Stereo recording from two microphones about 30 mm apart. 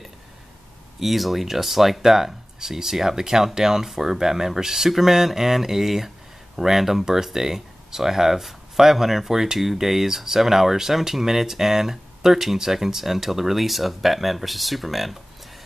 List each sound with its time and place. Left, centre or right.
0.9 s speech: centre